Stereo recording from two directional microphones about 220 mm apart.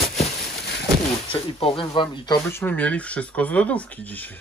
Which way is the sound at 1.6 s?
25° left (ahead or behind).